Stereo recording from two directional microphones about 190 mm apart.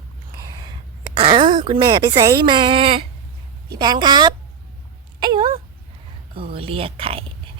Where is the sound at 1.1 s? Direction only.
25° right (ahead or behind).